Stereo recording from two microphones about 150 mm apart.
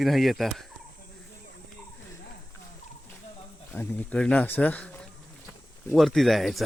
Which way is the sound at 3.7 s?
10° left (ahead or behind).